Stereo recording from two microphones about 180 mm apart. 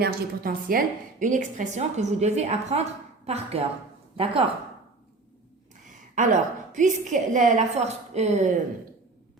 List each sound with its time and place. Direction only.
0.0 s a woman's voice: 55° right (ahead or behind); by 4.5 s 30° right (ahead or behind)
5.9 s a woman's voice: 45° right (ahead or behind)